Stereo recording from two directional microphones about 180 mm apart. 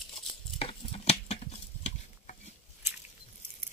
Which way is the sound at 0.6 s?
30° left (ahead or behind).